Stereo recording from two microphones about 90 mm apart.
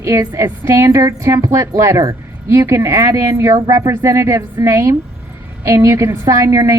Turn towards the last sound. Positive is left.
turn(degrees=-35)  # may be behind; listen again after turning